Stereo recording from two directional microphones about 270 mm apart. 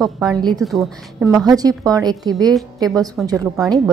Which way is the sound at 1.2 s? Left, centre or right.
Centre.